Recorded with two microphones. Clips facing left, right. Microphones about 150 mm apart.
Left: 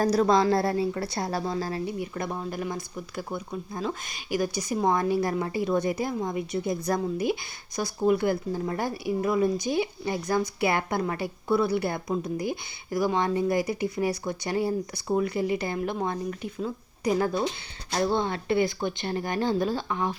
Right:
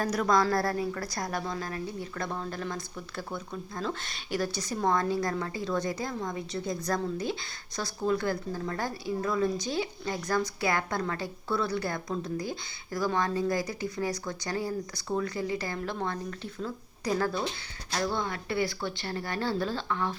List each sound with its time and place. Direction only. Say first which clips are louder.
0.0 s a woman's voice: left 5 dB; 30° left (ahead or behind)
1.8 s a woman's voice: left 4 dB; 20° left (ahead or behind)